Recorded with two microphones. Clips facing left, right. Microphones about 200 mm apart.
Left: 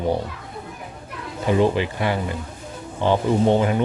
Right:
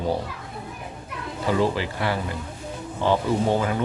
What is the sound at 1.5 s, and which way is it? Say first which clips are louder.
Speech: left 4 dB; 20° left (ahead or behind).